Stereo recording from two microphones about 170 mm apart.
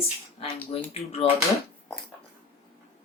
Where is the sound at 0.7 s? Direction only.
35° left (ahead or behind).